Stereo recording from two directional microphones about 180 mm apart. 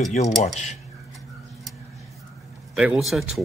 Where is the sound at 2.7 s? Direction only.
5° right (ahead or behind).